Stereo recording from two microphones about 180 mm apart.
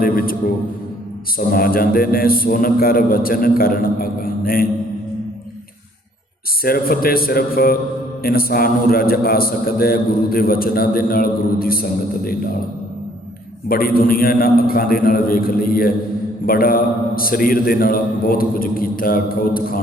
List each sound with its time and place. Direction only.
0.0 s a man's voice: 55° left (ahead or behind)
1.4 s a man's voice: 55° left (ahead or behind)
6.6 s a man's voice: 55° left (ahead or behind)
13.7 s a man's voice: 55° left (ahead or behind)